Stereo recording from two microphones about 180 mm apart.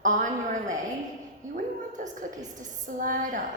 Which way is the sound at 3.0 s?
50° right (ahead or behind).